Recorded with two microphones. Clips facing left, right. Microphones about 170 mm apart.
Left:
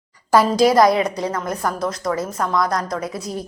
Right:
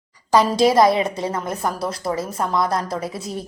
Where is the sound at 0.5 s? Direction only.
25° right (ahead or behind).